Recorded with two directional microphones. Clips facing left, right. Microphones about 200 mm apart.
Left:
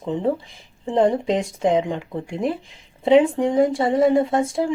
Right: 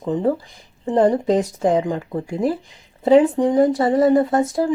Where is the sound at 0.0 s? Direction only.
Centre (ahead or behind).